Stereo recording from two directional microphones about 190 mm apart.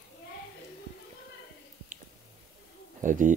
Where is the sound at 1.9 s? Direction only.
45° right (ahead or behind).